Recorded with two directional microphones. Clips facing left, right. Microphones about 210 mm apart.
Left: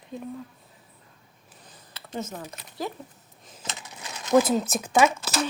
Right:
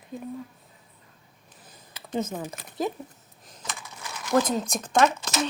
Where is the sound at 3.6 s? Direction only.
20° left (ahead or behind).